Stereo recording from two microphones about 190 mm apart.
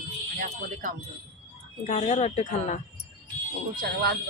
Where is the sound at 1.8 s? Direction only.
35° left (ahead or behind).